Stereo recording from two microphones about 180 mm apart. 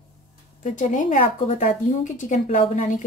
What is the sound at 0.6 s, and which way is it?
Speech, 45° left (ahead or behind).